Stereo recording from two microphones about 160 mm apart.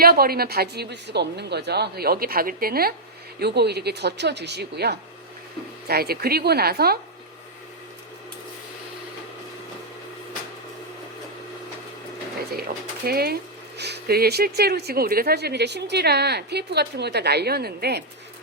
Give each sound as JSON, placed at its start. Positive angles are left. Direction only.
{"t": 0.0, "sound": "a woman's voice", "side_deg": -70}
{"t": 3.4, "sound": "speech", "side_deg": -90}
{"t": 5.9, "sound": "a woman's voice", "side_deg": -75}
{"t": 12.5, "sound": "speech", "side_deg": -70}